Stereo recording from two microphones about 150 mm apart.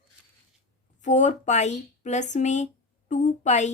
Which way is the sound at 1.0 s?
55° left (ahead or behind).